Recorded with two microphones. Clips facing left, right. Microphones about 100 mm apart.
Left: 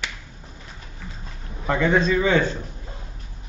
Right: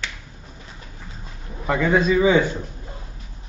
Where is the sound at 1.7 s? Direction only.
5° right (ahead or behind).